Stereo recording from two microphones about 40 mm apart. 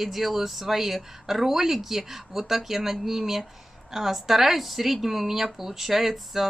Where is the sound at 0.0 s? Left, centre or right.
Centre.